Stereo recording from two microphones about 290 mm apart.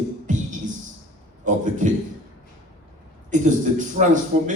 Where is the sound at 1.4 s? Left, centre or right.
Right.